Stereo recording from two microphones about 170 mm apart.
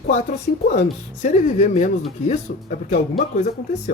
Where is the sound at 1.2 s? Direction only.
45° left (ahead or behind).